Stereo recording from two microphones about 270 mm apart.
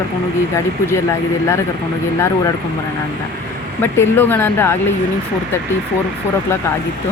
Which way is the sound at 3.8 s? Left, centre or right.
Centre.